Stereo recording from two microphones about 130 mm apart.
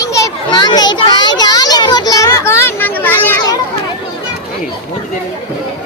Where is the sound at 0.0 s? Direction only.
25° left (ahead or behind).